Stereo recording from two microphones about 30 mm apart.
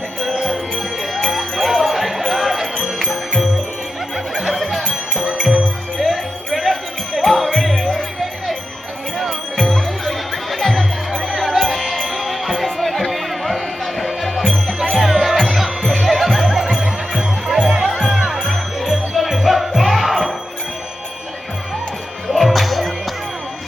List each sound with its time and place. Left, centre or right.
1.1 s music: centre
4.4 s music: centre
6.0 s music: centre
9.6 s music: centre
18.0 s music: right
18.4 s music: centre
22.3 s music: centre